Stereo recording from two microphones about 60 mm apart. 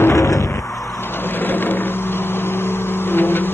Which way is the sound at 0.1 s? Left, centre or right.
Left.